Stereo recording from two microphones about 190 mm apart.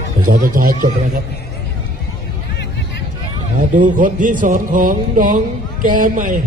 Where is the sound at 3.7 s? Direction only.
45° right (ahead or behind).